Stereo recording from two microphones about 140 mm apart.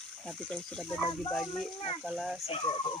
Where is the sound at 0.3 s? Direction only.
5° left (ahead or behind).